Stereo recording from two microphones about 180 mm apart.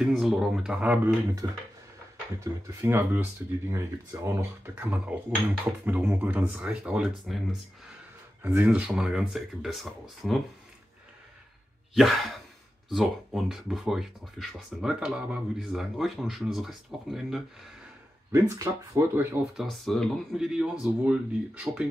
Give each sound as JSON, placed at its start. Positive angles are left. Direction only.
{"t": 0.0, "sound": "speech", "side_deg": 0}
{"t": 2.8, "sound": "speech", "side_deg": -10}
{"t": 8.4, "sound": "speech", "side_deg": -10}
{"t": 11.9, "sound": "speech", "side_deg": 0}
{"t": 18.3, "sound": "speech", "side_deg": -15}
{"t": 19.5, "sound": "speech", "side_deg": 0}